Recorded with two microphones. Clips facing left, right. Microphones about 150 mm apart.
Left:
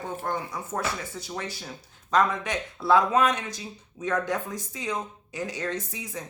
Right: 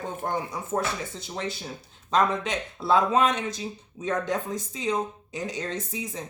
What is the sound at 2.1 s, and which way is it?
Speech, 25° right (ahead or behind).